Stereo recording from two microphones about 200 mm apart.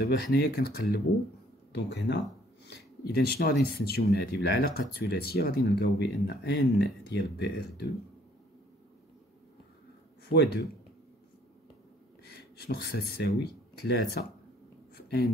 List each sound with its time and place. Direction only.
0.0 s speech: 50° left (ahead or behind)
3.2 s speech: 50° left (ahead or behind)
10.3 s speech: 60° left (ahead or behind)
12.4 s speech: 55° left (ahead or behind)
15.0 s a sound: 55° left (ahead or behind)